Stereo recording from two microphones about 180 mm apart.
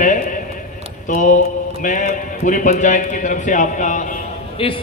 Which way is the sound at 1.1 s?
45° left (ahead or behind).